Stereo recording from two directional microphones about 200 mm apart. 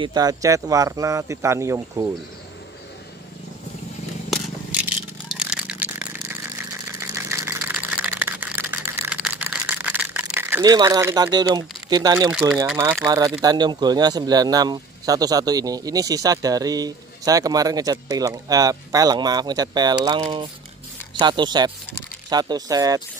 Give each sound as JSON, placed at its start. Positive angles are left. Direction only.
{"t": 0.0, "sound": "speech", "side_deg": -20}
{"t": 5.4, "sound": "crushing", "side_deg": -5}
{"t": 7.0, "sound": "a sound", "side_deg": -15}
{"t": 12.3, "sound": "speech", "side_deg": -5}
{"t": 13.0, "sound": "speech", "side_deg": -20}